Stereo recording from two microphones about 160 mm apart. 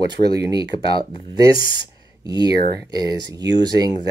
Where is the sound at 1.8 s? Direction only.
25° right (ahead or behind).